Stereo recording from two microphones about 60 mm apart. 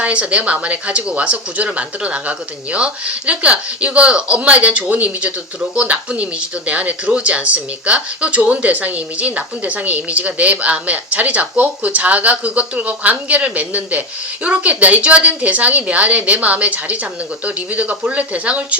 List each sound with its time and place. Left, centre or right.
0.0 s speech: right